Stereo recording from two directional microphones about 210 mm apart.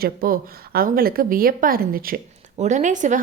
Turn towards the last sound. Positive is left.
turn(degrees=-35)  # may be behind; listen again after turning